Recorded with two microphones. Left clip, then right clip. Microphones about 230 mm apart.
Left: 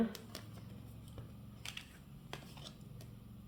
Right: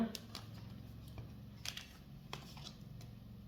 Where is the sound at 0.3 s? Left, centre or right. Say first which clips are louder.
Even; centre.